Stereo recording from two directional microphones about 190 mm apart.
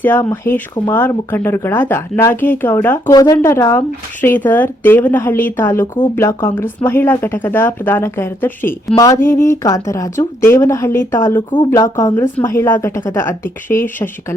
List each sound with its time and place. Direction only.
0.0 s speech: 10° left (ahead or behind)